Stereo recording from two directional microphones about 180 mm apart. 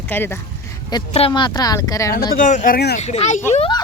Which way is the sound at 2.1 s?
50° left (ahead or behind).